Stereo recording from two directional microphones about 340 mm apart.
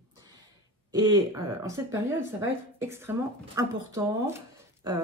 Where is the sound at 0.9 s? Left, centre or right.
Centre.